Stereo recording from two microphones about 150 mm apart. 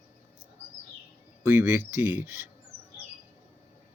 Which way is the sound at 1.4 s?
15° right (ahead or behind).